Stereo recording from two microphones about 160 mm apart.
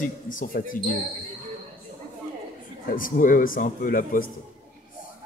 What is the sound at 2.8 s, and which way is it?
Speech, 60° left (ahead or behind).